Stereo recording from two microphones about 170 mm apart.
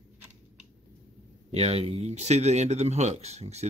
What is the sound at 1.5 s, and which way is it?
Speech, 35° right (ahead or behind).